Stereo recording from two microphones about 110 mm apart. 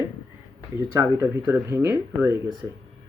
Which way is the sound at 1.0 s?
20° right (ahead or behind).